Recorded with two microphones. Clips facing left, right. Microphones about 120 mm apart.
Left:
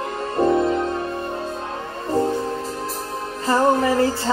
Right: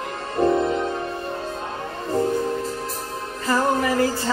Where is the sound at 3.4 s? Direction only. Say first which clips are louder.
Left 3 dB; 30° left (ahead or behind).